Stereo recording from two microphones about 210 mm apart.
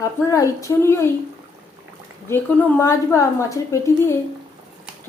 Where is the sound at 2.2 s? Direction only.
10° left (ahead or behind).